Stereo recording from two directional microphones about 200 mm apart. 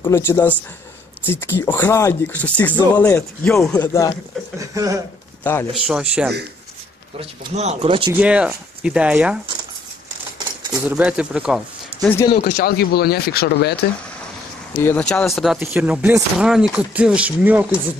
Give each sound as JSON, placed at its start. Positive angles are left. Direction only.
{"t": 0.0, "sound": "speech", "side_deg": 10}
{"t": 4.6, "sound": "speech", "side_deg": -15}
{"t": 5.4, "sound": "speech", "side_deg": 10}
{"t": 5.9, "sound": "speech", "side_deg": -5}
{"t": 7.2, "sound": "speech", "side_deg": -30}
{"t": 8.1, "sound": "speech", "side_deg": -5}
{"t": 10.9, "sound": "speech", "side_deg": -5}
{"t": 12.3, "sound": "speech", "side_deg": 50}
{"t": 14.8, "sound": "speech", "side_deg": 10}